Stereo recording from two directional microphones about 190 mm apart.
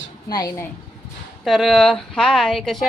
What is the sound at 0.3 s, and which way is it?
Speech, 20° left (ahead or behind).